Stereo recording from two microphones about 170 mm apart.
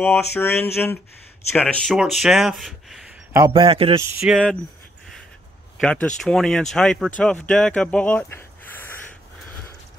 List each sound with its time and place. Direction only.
0.0 s a sound: 15° left (ahead or behind)
1.6 s speech: 5° left (ahead or behind)
3.3 s a man's voice: 25° right (ahead or behind)
4.2 s speech: centre (ahead or behind)
5.8 s speech: 5° left (ahead or behind)